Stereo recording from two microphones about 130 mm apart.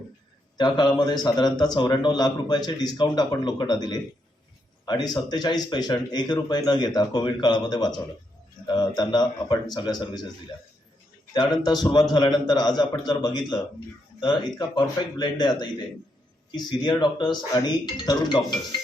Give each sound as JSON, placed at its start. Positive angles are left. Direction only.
{"t": 0.5, "sound": "a man's voice", "side_deg": 35}
{"t": 11.3, "sound": "a man's voice", "side_deg": 35}